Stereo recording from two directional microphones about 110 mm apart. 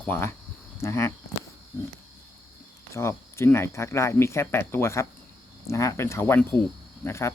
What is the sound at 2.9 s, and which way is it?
Speech, 25° left (ahead or behind).